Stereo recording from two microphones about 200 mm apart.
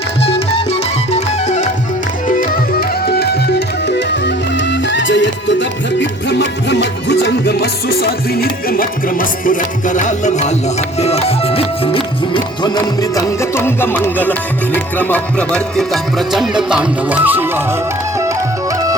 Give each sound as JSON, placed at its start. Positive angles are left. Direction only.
{"t": 0.2, "sound": "music", "side_deg": 30}
{"t": 3.1, "sound": "music", "side_deg": 55}